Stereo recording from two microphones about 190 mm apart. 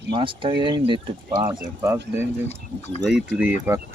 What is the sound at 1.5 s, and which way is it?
Speech, 15° right (ahead or behind).